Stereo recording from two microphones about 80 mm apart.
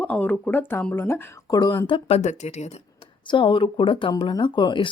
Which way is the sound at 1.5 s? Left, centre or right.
Left.